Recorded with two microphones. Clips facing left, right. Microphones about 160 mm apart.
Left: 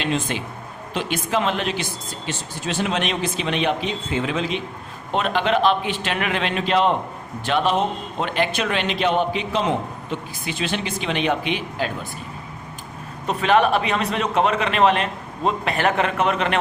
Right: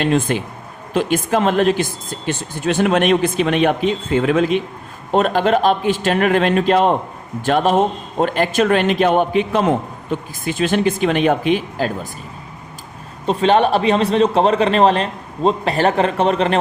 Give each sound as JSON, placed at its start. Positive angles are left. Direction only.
{"t": 0.0, "sound": "speech", "side_deg": -50}
{"t": 5.1, "sound": "speech", "side_deg": -40}
{"t": 13.2, "sound": "a man's voice", "side_deg": -30}